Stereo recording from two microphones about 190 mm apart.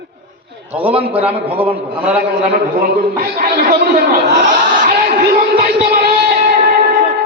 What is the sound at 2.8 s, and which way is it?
A man's voice, 50° right (ahead or behind).